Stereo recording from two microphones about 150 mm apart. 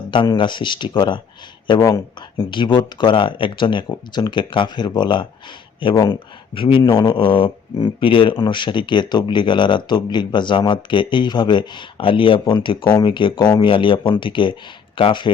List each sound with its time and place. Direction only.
0.1 s speech: 30° left (ahead or behind)